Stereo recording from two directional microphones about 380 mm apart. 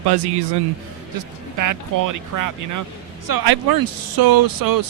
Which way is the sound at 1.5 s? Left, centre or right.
Right.